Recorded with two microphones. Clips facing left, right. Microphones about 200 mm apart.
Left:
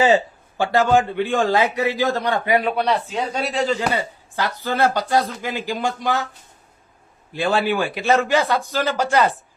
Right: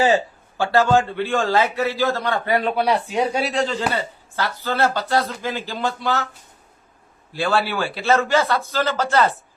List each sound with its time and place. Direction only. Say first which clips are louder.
0.0 s speech: left 1 dB; 15° left (ahead or behind)
2.7 s speech: right 1 dB; 10° right (ahead or behind)
3.4 s speech: left 1 dB; 5° left (ahead or behind)
7.3 s speech: left 2 dB; 20° left (ahead or behind)